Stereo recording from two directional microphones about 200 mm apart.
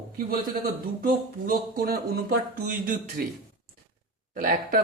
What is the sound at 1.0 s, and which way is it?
Speech, 50° right (ahead or behind).